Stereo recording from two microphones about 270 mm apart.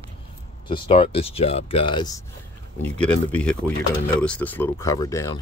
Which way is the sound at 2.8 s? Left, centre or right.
Centre.